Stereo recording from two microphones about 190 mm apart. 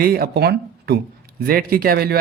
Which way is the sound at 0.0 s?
50° right (ahead or behind).